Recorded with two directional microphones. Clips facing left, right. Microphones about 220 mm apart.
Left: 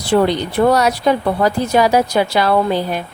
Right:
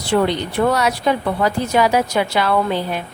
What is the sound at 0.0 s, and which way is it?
Speech, 35° left (ahead or behind).